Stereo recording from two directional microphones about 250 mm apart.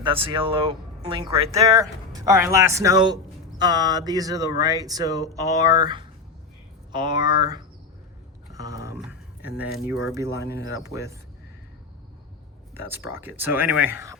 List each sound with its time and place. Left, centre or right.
0.0 s speech: centre
8.5 s a sound: centre
10.2 s speech: centre
12.9 s speech: centre